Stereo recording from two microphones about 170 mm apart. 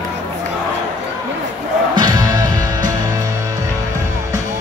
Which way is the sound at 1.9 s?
25° right (ahead or behind).